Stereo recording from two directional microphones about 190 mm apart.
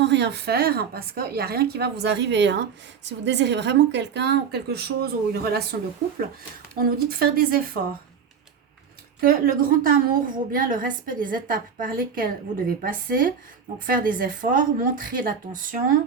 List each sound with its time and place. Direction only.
0.0 s speech: 65° right (ahead or behind)
6.7 s a woman's voice: 50° right (ahead or behind)
9.2 s a woman's voice: 50° right (ahead or behind)